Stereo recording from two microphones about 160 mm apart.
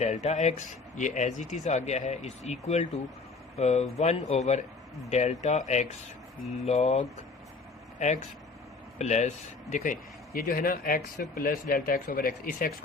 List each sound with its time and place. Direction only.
0.0 s speech: 45° left (ahead or behind); by 12.7 s 60° left (ahead or behind)